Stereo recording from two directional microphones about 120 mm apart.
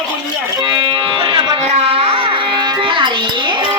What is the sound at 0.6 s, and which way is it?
Music, 40° right (ahead or behind).